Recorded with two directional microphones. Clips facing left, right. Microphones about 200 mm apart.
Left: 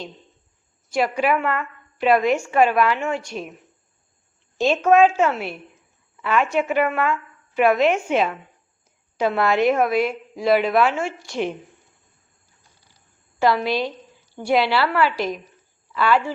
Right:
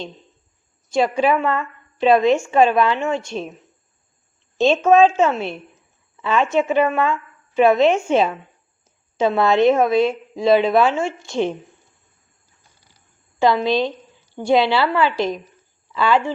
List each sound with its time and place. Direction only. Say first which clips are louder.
0.9 s a woman's voice: right 3 dB; 25° right (ahead or behind)
4.5 s a woman's voice: right 2 dB; 25° right (ahead or behind)
13.4 s a woman's voice: right 3 dB; 25° right (ahead or behind)